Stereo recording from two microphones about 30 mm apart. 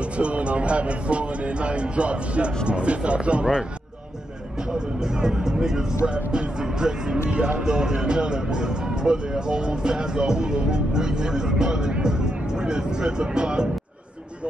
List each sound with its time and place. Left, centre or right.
0.2 s speech: right
4.7 s speech: right
6.0 s speech: right
6.6 s speech: right
7.2 s speech: right